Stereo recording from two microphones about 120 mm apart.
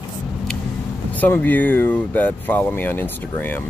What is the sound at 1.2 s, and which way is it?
Speech, 15° left (ahead or behind).